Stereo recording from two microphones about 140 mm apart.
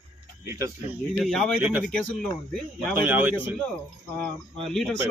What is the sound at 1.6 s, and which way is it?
Speech, 10° right (ahead or behind).